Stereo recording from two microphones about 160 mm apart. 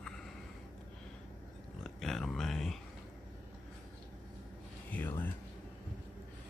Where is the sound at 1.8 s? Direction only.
Centre (ahead or behind).